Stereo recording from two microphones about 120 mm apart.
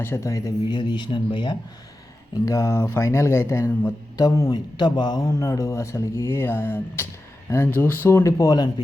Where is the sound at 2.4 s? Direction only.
25° left (ahead or behind).